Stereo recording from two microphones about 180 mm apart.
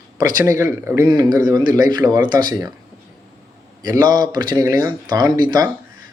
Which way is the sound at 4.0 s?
20° right (ahead or behind).